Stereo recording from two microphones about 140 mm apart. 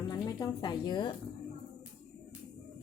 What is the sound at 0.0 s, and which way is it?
Speech, 30° left (ahead or behind).